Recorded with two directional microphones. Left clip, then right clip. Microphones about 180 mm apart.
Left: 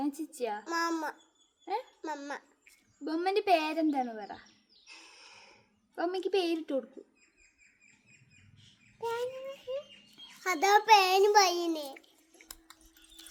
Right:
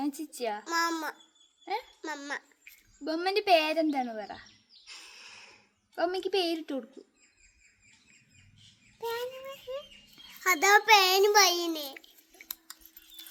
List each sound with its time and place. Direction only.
0.0 s child singing: 25° right (ahead or behind)
0.6 s a child's voice: centre (ahead or behind)
1.6 s a child's voice: 25° right (ahead or behind)
2.0 s a child's voice: centre (ahead or behind)
3.0 s a child's voice: 25° right (ahead or behind)
4.9 s snort: centre (ahead or behind)
5.9 s a child's voice: 25° right (ahead or behind)
9.0 s a child's voice: 5° right (ahead or behind)